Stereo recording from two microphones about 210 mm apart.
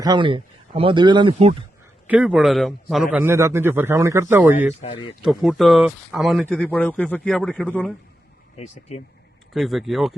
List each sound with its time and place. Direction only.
0.0 s speech: 20° right (ahead or behind)
2.0 s a man's voice: 5° right (ahead or behind)
4.8 s speech: 25° left (ahead or behind)
5.2 s speech: centre (ahead or behind)
8.5 s speech: 30° left (ahead or behind)
9.5 s speech: centre (ahead or behind)